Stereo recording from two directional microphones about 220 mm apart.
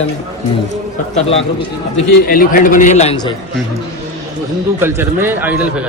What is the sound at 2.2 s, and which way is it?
A man's voice, 40° left (ahead or behind).